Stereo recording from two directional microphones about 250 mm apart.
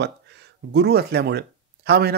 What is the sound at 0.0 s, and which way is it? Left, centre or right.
Speech, right.